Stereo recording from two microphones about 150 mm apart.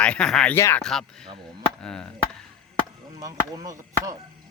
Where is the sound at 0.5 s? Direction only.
15° left (ahead or behind).